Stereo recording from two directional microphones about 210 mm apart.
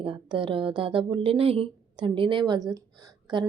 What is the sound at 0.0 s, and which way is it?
Speech, 25° right (ahead or behind).